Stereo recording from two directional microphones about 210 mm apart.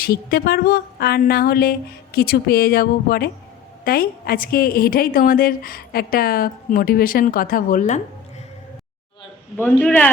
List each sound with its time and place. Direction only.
0.0 s a woman's voice: 45° left (ahead or behind)
9.6 s a man's voice: 5° left (ahead or behind)